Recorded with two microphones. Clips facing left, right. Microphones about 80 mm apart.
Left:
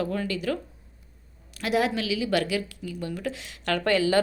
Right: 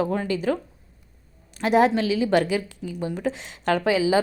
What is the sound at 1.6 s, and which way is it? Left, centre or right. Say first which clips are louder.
Speech: right 6 dB; right.